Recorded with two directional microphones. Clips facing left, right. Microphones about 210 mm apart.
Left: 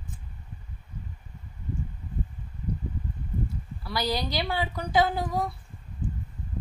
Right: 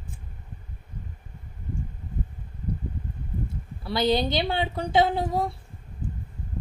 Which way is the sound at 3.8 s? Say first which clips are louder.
Right 6 dB; 25° right (ahead or behind).